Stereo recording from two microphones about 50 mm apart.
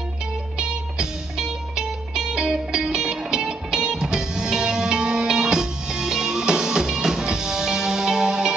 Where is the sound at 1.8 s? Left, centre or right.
Centre.